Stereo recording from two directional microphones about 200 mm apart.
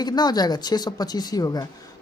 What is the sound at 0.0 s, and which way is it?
A woman's voice, 20° left (ahead or behind).